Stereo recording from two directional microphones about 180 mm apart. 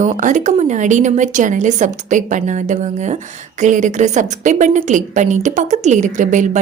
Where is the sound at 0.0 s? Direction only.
45° right (ahead or behind).